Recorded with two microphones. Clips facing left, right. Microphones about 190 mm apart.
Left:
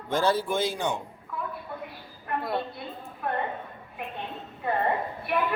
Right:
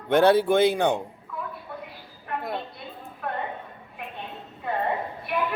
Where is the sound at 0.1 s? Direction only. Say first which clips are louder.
Right 7 dB; 65° right (ahead or behind).